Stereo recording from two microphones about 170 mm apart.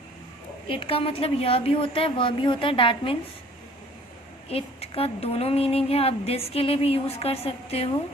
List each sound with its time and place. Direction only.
0.7 s a woman's voice: 35° left (ahead or behind)
4.4 s a woman's voice: 35° left (ahead or behind)